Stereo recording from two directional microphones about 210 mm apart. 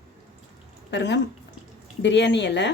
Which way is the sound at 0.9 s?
55° left (ahead or behind).